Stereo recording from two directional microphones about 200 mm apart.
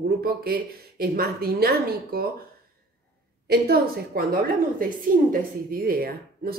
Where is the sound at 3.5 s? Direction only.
50° right (ahead or behind).